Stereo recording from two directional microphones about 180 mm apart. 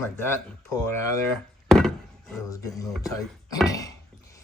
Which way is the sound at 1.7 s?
Centre (ahead or behind).